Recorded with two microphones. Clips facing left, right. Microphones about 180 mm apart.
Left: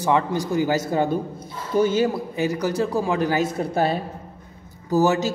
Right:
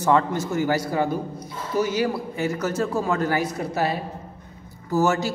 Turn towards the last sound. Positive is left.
turn(degrees=15)  # may be behind; listen again after turning